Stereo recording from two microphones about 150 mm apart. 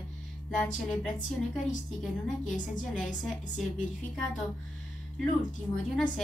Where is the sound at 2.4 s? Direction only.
60° left (ahead or behind).